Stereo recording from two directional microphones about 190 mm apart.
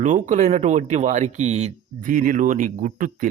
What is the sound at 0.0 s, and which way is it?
Speech, 40° right (ahead or behind).